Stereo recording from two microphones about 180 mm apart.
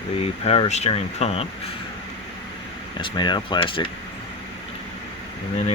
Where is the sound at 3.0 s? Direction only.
25° left (ahead or behind).